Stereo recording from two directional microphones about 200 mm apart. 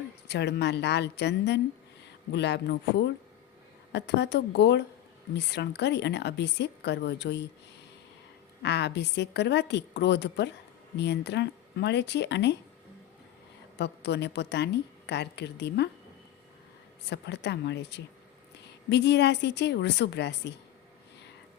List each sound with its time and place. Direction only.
0.3 s a woman's voice: 60° left (ahead or behind)
8.6 s a woman's voice: 60° left (ahead or behind)
13.7 s a woman's voice: 60° left (ahead or behind)
17.1 s a woman's voice: 60° left (ahead or behind)